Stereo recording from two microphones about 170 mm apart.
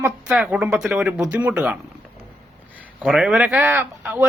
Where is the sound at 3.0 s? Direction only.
Centre (ahead or behind).